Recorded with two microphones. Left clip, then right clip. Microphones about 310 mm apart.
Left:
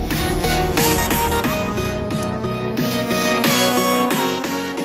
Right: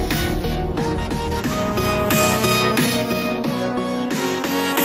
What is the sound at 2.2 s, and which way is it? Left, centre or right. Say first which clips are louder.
Music: right 7 dB; right.